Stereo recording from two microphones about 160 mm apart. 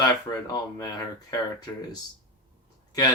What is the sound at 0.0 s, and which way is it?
Speech, 25° left (ahead or behind).